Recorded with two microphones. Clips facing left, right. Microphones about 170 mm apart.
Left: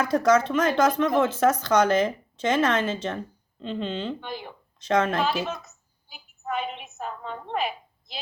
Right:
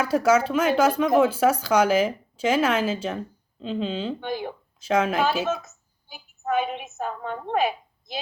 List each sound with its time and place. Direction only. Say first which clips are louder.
0.0 s speech: right 1 dB; 5° right (ahead or behind)
4.2 s speech: right 6 dB; 50° right (ahead or behind)
4.8 s speech: right 1 dB; 10° right (ahead or behind)
5.5 s speech: right 7 dB; 50° right (ahead or behind)
6.4 s a sound: right 5 dB; 45° right (ahead or behind)